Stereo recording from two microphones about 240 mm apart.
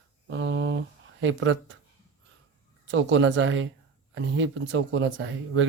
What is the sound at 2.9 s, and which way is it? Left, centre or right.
Speech, right.